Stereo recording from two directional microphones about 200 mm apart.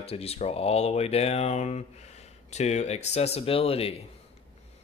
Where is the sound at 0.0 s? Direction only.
30° left (ahead or behind).